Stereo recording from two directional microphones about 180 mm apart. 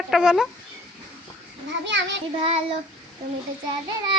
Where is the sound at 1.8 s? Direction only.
85° right.